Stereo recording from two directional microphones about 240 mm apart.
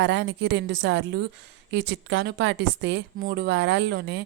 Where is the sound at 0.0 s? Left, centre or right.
Right.